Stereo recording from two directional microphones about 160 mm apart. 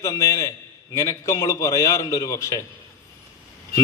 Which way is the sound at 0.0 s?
15° left (ahead or behind).